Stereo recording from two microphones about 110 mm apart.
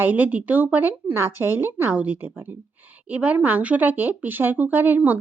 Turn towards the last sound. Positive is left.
turn(degrees=-15)  # may be behind; listen again after turning